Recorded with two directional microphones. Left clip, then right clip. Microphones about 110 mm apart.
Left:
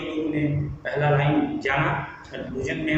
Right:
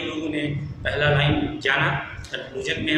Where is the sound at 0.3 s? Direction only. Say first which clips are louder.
Left 1 dB; 15° right (ahead or behind).